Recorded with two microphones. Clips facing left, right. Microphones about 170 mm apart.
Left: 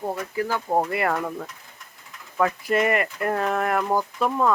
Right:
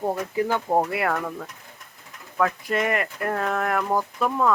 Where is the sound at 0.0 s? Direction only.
20° right (ahead or behind).